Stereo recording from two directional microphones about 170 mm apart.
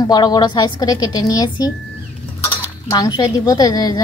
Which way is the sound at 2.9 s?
25° left (ahead or behind).